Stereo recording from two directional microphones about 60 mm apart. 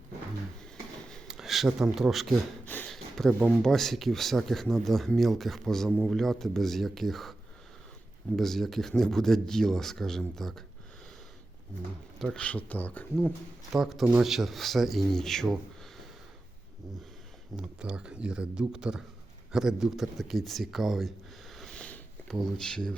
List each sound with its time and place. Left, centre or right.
1.3 s speech: centre
2.9 s a sound: centre
3.6 s speech: centre
8.4 s speech: centre
12.4 s speech: left
13.7 s speech: centre
17.6 s speech: centre
21.5 s sniff: centre
21.8 s a sound: left
22.3 s speech: centre